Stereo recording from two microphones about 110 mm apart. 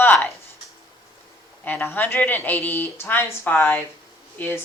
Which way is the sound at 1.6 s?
15° left (ahead or behind).